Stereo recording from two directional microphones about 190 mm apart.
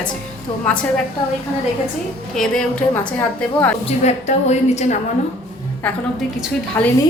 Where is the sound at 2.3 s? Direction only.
5° left (ahead or behind).